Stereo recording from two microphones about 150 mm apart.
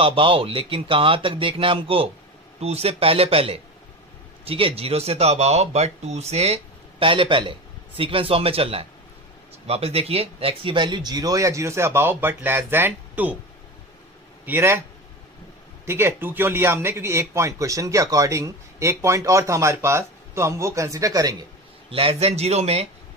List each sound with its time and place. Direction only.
0.0 s a man's voice: 35° right (ahead or behind); by 13.4 s 10° right (ahead or behind)
14.4 s a man's voice: 15° right (ahead or behind)
15.8 s a man's voice: 15° right (ahead or behind)
21.9 s speech: 40° right (ahead or behind)